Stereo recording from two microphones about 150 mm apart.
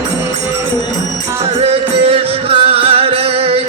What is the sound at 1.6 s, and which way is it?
Music, 45° right (ahead or behind).